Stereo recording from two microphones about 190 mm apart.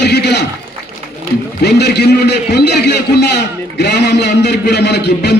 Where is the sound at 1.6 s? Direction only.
60° left (ahead or behind).